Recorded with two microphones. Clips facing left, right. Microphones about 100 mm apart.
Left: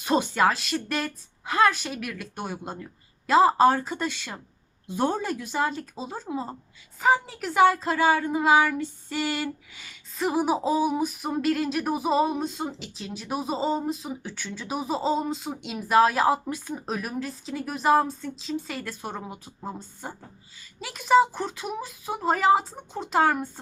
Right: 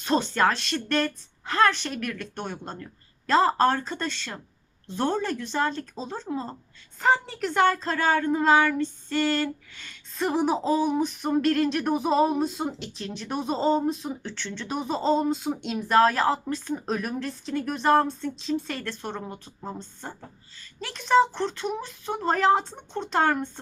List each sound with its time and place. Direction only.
0.0 s a woman's voice: 10° left (ahead or behind)